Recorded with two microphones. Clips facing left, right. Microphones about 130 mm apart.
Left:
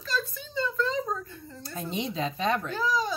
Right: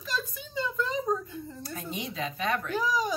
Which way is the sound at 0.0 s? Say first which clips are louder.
Left 2 dB; 15° right (ahead or behind).